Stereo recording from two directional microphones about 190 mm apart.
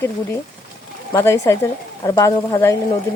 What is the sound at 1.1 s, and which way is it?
Speech, 15° left (ahead or behind).